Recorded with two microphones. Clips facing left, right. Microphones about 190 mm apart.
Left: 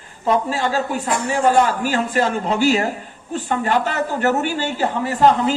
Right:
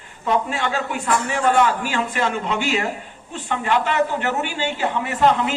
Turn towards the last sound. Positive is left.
turn(degrees=35)  # may be behind; listen again after turning